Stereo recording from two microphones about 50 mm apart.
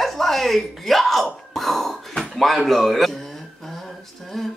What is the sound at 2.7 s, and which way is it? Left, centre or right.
Speech, centre.